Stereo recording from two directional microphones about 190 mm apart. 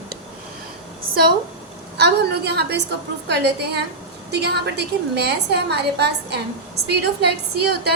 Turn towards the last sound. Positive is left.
turn(degrees=-60)  # may be behind; listen again after turning